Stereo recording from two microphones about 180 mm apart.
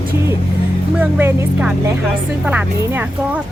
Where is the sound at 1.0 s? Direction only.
10° right (ahead or behind).